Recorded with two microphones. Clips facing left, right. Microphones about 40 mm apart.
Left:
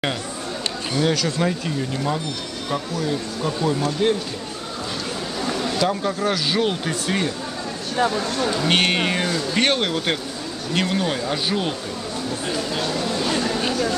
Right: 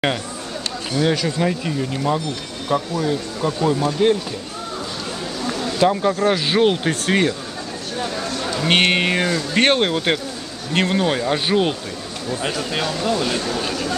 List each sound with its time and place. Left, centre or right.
0.9 s speech: centre
5.8 s speech: centre; by 7.3 s right
8.2 s speech: centre
8.6 s speech: right
9.6 s speech: right
9.8 s speech: centre
10.7 s speech: right
13.4 s speech: centre